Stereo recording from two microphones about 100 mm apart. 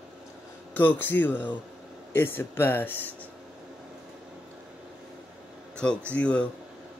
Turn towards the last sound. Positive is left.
turn(degrees=10)  # may be behind; listen again after turning